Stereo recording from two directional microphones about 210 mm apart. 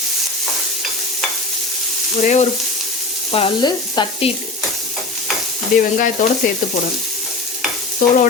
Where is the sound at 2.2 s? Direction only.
35° left (ahead or behind).